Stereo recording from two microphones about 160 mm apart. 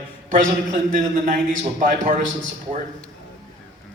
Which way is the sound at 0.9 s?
55° right (ahead or behind).